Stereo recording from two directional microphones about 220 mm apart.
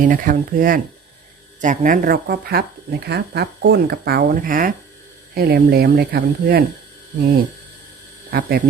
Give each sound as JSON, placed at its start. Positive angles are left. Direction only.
{"t": 0.0, "sound": "speech", "side_deg": -35}
{"t": 8.3, "sound": "speech", "side_deg": -45}